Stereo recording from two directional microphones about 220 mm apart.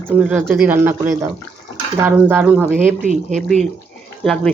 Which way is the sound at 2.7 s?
35° right (ahead or behind).